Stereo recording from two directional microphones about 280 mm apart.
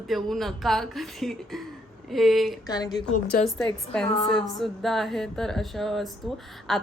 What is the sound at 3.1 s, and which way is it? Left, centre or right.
Speech, left.